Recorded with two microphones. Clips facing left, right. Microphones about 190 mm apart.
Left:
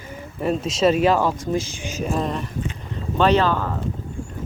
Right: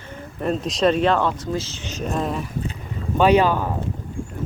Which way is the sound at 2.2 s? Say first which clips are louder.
Even; 5° right (ahead or behind).